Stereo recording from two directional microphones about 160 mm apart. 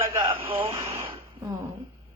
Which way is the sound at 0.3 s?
35° right (ahead or behind).